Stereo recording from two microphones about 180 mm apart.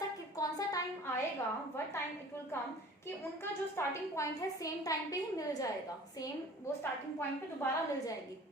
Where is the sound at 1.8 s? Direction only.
15° left (ahead or behind).